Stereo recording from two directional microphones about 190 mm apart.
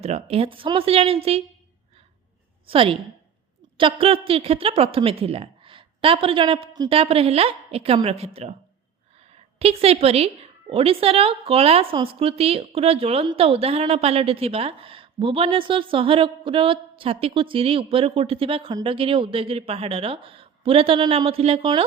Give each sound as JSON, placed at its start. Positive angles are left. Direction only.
{"t": 0.0, "sound": "speech", "side_deg": -35}
{"t": 2.6, "sound": "a woman's voice", "side_deg": -30}